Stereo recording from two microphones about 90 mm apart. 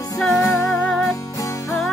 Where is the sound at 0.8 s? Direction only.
5° left (ahead or behind).